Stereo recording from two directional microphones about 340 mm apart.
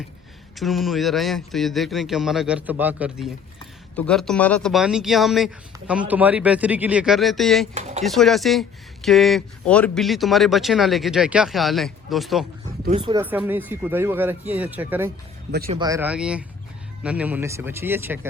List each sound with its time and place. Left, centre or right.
0.6 s speech: centre
7.7 s speech: centre
8.0 s speech: centre
12.8 s speech: centre
15.5 s speech: right
15.8 s speech: centre